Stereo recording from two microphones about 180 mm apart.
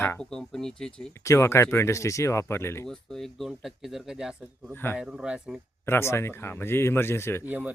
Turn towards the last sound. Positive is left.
turn(degrees=-10)  # may be behind; listen again after turning